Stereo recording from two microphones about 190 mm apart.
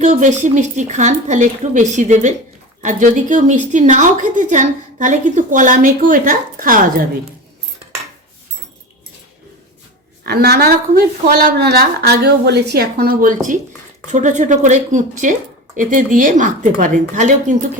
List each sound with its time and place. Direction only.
0.0 s a woman's voice: 40° right (ahead or behind)
10.2 s a woman's voice: 55° right (ahead or behind); by 17.7 s 40° right (ahead or behind)